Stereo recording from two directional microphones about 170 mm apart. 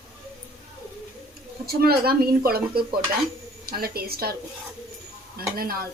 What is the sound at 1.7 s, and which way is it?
A woman's voice, 65° right (ahead or behind).